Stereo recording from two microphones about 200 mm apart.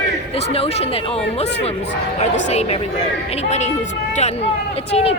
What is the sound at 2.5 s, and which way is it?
Speech, 30° left (ahead or behind).